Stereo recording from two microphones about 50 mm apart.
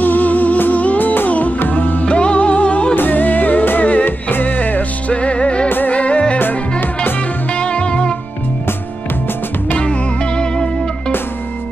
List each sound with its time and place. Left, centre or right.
0.0 s music: left
2.0 s music: left
3.0 s music: left
7.5 s music: left
9.8 s music: centre